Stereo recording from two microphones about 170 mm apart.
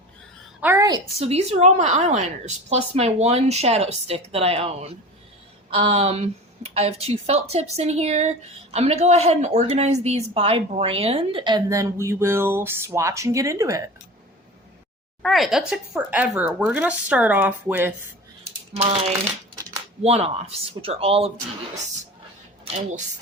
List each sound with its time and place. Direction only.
0.6 s a sound: 10° right (ahead or behind)
1.2 s a woman's voice: 40° right (ahead or behind); by 13.9 s 20° right (ahead or behind)
15.2 s speech: centre (ahead or behind)
18.8 s speech: 35° right (ahead or behind)